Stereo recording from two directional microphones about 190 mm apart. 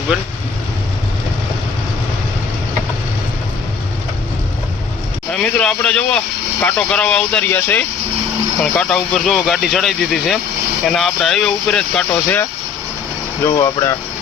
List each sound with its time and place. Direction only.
5.3 s speech: 5° left (ahead or behind)
13.4 s speech: 15° left (ahead or behind)